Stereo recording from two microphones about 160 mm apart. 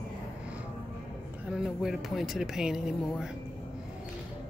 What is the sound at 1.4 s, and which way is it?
Speech, 5° right (ahead or behind).